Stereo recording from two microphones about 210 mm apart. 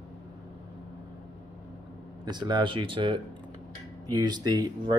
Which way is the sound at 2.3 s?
20° right (ahead or behind).